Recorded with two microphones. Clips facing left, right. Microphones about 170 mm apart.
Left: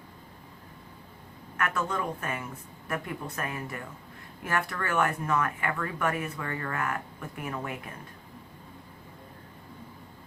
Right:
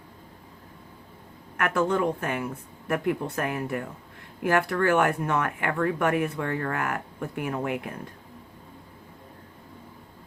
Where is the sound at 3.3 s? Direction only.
70° right (ahead or behind).